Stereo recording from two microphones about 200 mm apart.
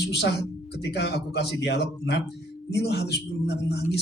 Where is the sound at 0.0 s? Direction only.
55° left (ahead or behind).